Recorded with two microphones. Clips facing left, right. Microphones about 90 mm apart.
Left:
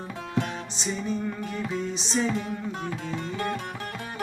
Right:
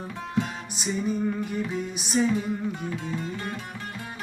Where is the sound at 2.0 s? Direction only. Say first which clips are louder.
Right 6 dB; 10° right (ahead or behind).